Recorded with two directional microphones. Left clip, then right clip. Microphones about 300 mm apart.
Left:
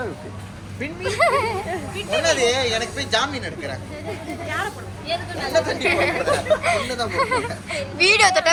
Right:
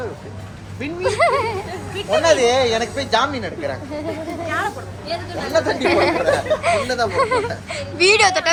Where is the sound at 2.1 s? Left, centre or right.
Right.